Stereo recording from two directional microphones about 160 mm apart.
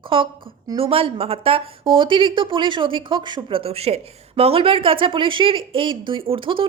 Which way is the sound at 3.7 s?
40° right (ahead or behind).